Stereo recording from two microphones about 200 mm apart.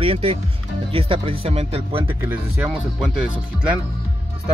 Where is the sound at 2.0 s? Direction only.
10° right (ahead or behind).